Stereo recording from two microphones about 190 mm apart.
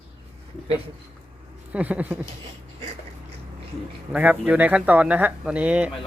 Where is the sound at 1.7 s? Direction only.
5° right (ahead or behind).